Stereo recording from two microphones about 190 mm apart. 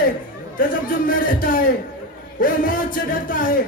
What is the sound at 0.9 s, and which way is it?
Speech, 45° left (ahead or behind).